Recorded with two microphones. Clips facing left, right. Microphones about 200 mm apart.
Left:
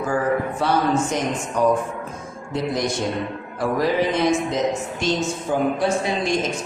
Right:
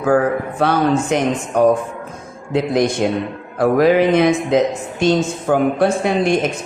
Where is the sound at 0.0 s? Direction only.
65° right (ahead or behind).